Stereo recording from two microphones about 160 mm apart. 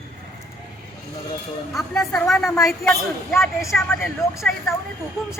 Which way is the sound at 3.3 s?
15° left (ahead or behind).